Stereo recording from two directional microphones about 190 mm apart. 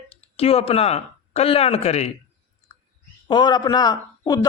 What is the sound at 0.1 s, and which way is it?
Speech, 30° left (ahead or behind).